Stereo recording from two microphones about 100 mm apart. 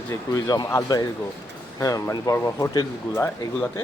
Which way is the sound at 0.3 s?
40° left (ahead or behind).